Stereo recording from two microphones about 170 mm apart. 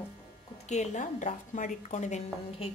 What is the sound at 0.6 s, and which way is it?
A woman's voice, 45° left (ahead or behind).